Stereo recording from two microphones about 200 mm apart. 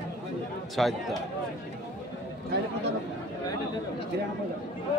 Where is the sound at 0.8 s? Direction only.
Centre (ahead or behind).